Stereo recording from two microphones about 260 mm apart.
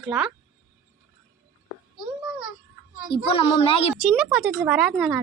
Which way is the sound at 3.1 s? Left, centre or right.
Left.